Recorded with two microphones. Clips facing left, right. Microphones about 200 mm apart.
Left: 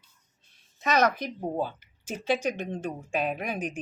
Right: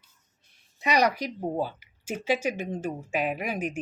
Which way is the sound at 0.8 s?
15° right (ahead or behind).